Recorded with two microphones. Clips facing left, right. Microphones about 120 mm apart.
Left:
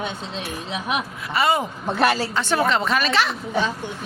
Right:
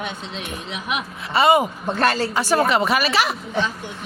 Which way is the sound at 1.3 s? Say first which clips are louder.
Right 5 dB; 20° right (ahead or behind).